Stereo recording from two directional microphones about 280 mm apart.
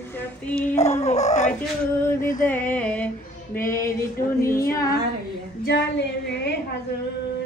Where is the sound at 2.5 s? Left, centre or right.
Centre.